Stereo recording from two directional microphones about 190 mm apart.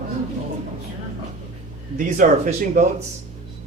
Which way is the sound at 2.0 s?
45° right (ahead or behind).